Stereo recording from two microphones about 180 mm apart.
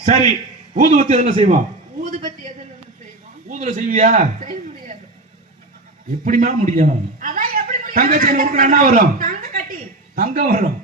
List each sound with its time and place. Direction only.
0.3 s a man's voice: 40° right (ahead or behind)
2.0 s a sound: 45° right (ahead or behind)
3.5 s a man's voice: 45° right (ahead or behind)
6.2 s a man's voice: 45° right (ahead or behind)